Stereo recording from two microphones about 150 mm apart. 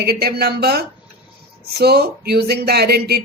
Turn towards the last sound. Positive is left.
turn(degrees=-90)